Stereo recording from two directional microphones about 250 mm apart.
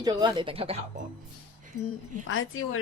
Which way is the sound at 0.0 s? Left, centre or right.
Centre.